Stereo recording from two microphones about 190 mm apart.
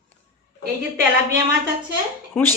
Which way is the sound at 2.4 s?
10° left (ahead or behind).